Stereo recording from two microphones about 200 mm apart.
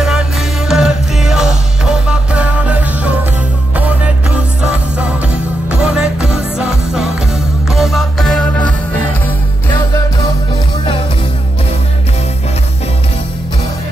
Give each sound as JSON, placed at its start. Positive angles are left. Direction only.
{"t": 0.7, "sound": "music", "side_deg": 0}
{"t": 5.7, "sound": "music", "side_deg": -5}